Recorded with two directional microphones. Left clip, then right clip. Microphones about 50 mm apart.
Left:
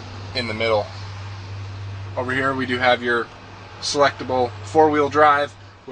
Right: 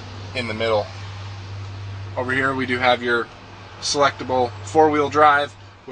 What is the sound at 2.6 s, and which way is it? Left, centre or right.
Speech, left.